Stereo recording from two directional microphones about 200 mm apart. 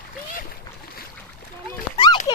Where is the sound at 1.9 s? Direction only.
25° left (ahead or behind).